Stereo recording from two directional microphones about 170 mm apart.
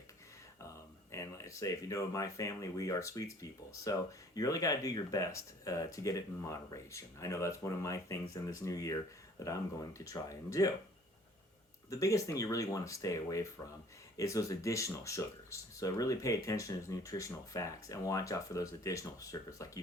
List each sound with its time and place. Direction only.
1.1 s speech: 20° left (ahead or behind)
11.9 s speech: 20° left (ahead or behind)